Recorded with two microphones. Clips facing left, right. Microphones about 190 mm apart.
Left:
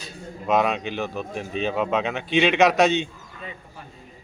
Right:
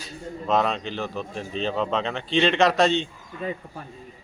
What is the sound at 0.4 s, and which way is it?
Speech, 15° left (ahead or behind).